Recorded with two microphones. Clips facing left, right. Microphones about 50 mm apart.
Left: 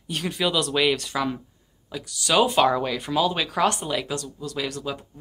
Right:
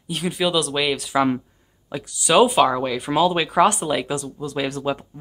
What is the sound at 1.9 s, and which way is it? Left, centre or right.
Speech, right.